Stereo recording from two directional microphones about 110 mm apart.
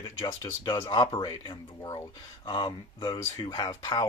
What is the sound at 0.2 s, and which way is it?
Speech, 35° left (ahead or behind).